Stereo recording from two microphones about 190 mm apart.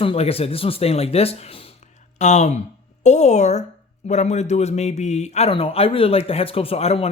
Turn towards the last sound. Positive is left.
turn(degrees=30)  # may be behind; listen again after turning